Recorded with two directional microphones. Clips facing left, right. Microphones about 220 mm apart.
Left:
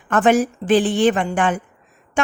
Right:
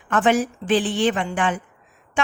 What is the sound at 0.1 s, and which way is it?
Speech, 45° left (ahead or behind).